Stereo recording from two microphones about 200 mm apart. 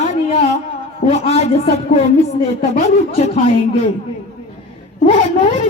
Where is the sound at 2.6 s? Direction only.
35° left (ahead or behind).